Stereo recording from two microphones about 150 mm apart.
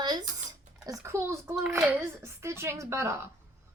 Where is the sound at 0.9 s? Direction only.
20° right (ahead or behind).